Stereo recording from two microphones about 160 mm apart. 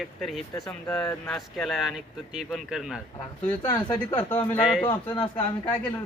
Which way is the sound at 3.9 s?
10° left (ahead or behind).